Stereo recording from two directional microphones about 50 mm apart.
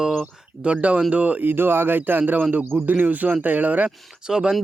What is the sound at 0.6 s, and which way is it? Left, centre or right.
Speech, right.